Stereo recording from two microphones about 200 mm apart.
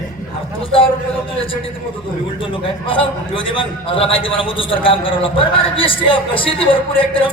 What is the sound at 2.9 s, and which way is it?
A man's voice, 25° left (ahead or behind).